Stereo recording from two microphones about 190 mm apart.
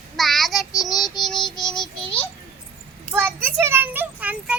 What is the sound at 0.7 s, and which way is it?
Child singing, 20° left (ahead or behind).